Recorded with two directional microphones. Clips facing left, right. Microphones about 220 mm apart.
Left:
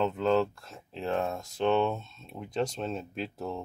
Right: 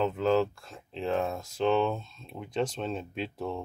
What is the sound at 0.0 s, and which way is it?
Speech, centre (ahead or behind).